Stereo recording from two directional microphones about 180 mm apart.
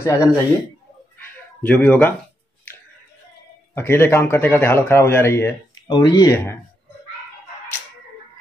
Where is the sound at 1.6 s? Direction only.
10° left (ahead or behind).